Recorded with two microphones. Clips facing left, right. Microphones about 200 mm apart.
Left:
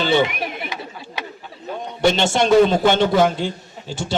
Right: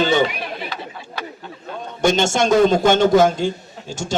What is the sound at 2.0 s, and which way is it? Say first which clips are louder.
A man's voice: even; 45° right (ahead or behind).